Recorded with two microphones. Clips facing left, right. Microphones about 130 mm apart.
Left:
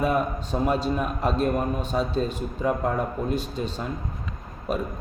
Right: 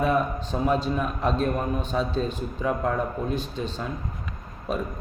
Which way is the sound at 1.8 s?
40° left (ahead or behind).